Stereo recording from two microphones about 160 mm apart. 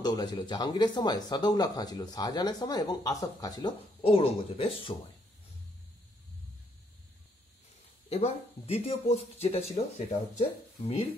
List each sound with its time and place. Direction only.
0.0 s speech: 25° left (ahead or behind)
4.0 s speech: 35° left (ahead or behind)
8.1 s speech: 40° left (ahead or behind)